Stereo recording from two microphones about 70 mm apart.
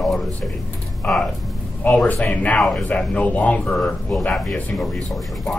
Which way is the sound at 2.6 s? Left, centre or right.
Centre.